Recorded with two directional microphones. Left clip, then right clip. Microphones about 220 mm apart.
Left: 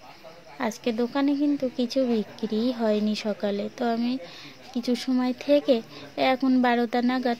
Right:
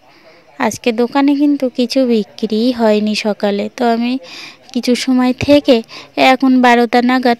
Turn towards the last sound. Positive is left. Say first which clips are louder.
# right 13 dB
turn(degrees=-40)  # may be behind; listen again after turning